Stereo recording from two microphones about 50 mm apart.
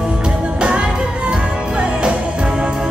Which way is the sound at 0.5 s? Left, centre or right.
Centre.